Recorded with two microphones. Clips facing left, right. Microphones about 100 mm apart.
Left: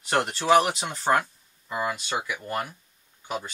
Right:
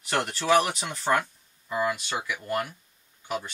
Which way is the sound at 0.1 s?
30° left (ahead or behind).